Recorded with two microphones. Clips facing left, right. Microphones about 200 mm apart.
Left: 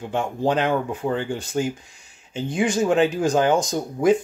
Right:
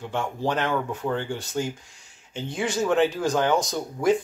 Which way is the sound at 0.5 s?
15° left (ahead or behind).